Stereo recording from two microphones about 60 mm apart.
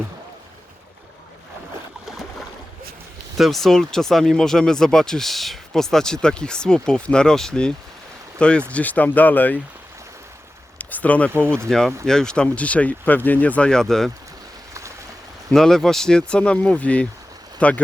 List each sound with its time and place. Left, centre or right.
3.3 s speech: centre; by 9.6 s left
10.8 s a sound: left
11.3 s speech: right
11.7 s speech: centre; by 13.7 s left
13.7 s speech: centre
14.7 s boat: right
15.5 s speech: centre; by 17.8 s left